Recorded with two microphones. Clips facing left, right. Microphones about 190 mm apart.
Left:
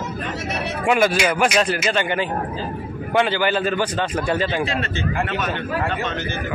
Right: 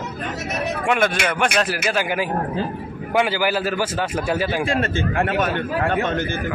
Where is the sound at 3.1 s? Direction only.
10° right (ahead or behind).